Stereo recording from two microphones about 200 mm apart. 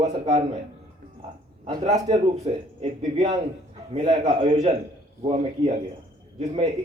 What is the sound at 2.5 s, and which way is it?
A man's voice, 30° right (ahead or behind).